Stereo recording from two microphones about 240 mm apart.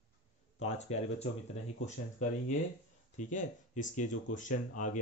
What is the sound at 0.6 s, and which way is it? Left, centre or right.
Speech, left.